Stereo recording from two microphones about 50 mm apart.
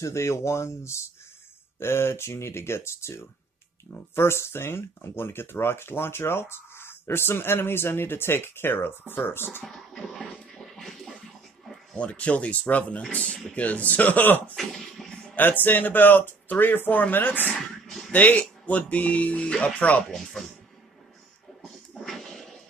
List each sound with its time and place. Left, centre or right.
0.0 s speech: left
9.7 s music: centre
12.0 s speech: left
14.5 s a sound: centre
15.3 s speech: left
17.8 s music: centre
18.1 s speech: left
20.2 s speech: centre
21.9 s a sound: centre